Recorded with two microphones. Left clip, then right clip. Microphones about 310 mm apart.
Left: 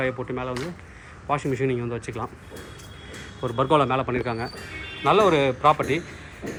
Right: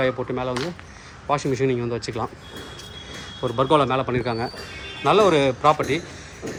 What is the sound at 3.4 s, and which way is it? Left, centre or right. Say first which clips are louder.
A man's voice: right 2 dB; centre.